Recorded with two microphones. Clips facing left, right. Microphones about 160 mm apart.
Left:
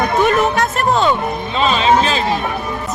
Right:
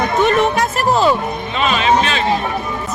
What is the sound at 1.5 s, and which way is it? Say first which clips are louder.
Speech: left 1 dB; 30° left (ahead or behind).